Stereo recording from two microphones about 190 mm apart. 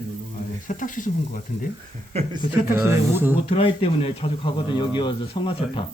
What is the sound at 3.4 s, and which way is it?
Speech, 30° left (ahead or behind).